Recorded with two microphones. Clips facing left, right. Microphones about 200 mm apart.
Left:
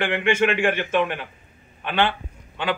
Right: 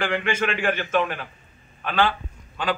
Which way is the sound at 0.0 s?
20° left (ahead or behind).